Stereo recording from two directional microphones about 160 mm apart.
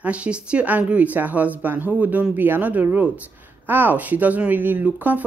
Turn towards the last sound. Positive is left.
turn(degrees=-10)  # may be behind; listen again after turning